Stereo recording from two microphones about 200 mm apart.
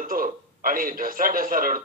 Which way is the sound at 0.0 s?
45° right (ahead or behind).